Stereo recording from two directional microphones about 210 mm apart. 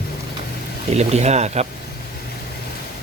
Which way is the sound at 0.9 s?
30° right (ahead or behind).